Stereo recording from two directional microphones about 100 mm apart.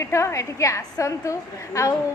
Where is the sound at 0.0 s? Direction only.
30° left (ahead or behind).